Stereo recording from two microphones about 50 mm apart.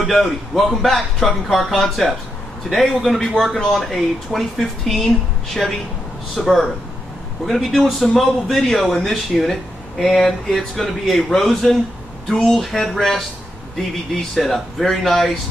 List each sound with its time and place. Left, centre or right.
0.0 s speech: centre
6.3 s speech: centre